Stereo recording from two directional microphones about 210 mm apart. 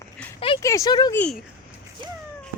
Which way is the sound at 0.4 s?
20° left (ahead or behind).